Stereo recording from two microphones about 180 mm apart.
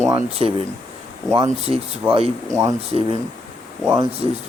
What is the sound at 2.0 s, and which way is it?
Speech, 5° right (ahead or behind).